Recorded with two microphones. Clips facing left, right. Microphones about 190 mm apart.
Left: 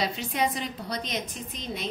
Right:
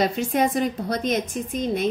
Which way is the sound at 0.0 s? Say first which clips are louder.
Right 7 dB; 50° right (ahead or behind).